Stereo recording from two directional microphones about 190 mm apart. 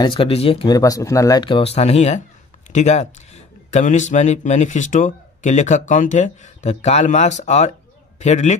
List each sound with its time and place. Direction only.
0.0 s a man's voice: 30° left (ahead or behind)